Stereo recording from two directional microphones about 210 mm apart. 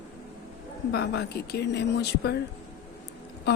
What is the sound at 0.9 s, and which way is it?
Speech, 50° left (ahead or behind).